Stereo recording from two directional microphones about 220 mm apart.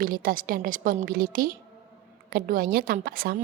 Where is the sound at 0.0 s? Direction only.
40° right (ahead or behind).